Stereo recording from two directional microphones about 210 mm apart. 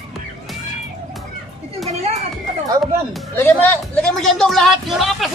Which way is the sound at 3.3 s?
10° left (ahead or behind).